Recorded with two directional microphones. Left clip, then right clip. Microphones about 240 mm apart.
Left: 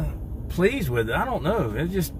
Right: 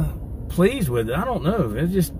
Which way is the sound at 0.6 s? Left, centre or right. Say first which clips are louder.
Right 2 dB; centre.